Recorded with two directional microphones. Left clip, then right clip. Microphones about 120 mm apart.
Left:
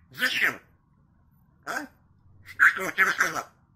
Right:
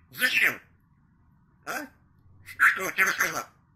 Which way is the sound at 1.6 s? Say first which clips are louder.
Left 1 dB; 15° left (ahead or behind).